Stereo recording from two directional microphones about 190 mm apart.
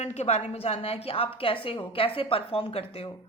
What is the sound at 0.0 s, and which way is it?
A woman's voice, 35° left (ahead or behind).